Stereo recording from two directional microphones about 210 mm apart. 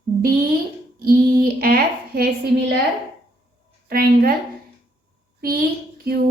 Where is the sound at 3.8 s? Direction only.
45° right (ahead or behind).